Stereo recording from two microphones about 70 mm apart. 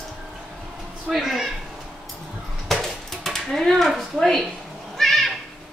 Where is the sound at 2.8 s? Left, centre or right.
Centre.